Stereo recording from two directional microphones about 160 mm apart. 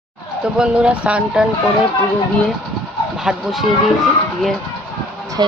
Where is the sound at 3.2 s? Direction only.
Centre (ahead or behind).